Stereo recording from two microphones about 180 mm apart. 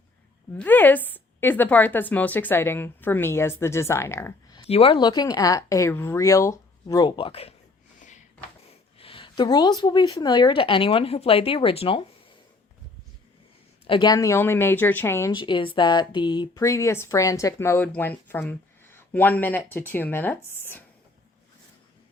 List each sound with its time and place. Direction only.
0.5 s speech: 10° left (ahead or behind)
4.6 s a woman's voice: 30° left (ahead or behind)
7.9 s a sound: 40° left (ahead or behind)
9.0 s a woman's voice: 30° left (ahead or behind)
13.8 s speech: 25° left (ahead or behind)
15.4 s speech: 25° left (ahead or behind)